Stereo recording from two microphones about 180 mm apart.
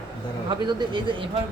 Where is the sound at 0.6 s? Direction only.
25° right (ahead or behind).